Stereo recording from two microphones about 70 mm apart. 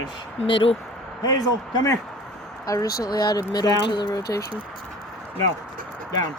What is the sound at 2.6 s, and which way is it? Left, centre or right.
Speech, left.